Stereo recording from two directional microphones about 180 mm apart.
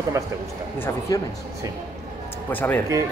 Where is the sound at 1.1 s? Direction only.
20° left (ahead or behind).